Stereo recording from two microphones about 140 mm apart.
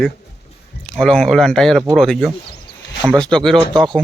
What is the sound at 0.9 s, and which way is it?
Speech, 5° left (ahead or behind).